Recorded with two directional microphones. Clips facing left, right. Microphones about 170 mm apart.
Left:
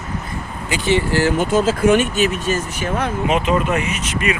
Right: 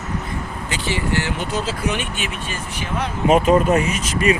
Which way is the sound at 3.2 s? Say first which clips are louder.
Right 6 dB; 40° right (ahead or behind).